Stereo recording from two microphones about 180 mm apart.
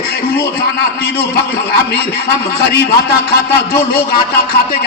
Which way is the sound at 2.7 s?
60° left (ahead or behind).